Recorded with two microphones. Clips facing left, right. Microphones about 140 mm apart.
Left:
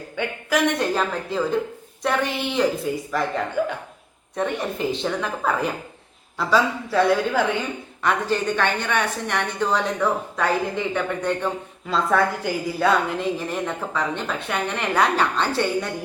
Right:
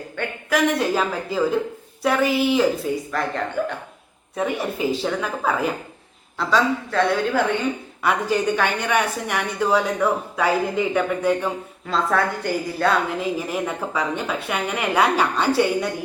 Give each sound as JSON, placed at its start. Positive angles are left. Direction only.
{"t": 0.2, "sound": "a woman's voice", "side_deg": 0}
{"t": 8.0, "sound": "a woman's voice", "side_deg": -10}